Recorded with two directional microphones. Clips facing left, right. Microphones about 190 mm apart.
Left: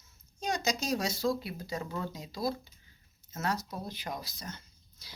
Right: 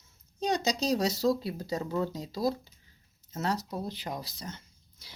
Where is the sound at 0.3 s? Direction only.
35° right (ahead or behind).